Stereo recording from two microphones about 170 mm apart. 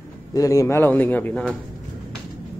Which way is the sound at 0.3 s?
20° left (ahead or behind).